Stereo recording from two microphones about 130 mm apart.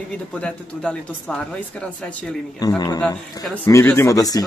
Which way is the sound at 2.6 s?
30° left (ahead or behind).